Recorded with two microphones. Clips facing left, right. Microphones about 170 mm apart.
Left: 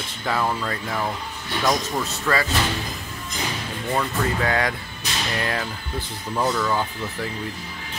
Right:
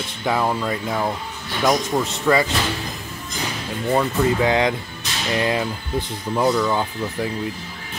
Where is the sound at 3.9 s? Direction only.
20° right (ahead or behind).